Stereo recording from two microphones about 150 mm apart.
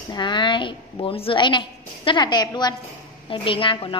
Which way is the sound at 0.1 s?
30° left (ahead or behind).